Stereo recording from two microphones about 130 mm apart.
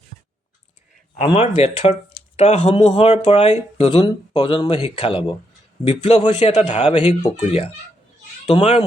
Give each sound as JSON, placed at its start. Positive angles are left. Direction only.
{"t": 1.3, "sound": "speech", "side_deg": 50}
{"t": 6.9, "sound": "speech", "side_deg": 40}
{"t": 7.4, "sound": "speech", "side_deg": 50}